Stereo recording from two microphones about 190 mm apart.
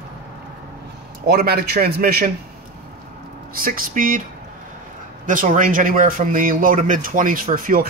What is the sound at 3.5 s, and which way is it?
Speech, 50° right (ahead or behind).